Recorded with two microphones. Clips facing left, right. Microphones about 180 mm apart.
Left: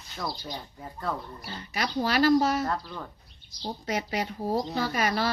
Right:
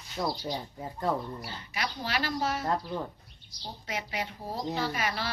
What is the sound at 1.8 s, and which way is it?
Speech, 40° left (ahead or behind).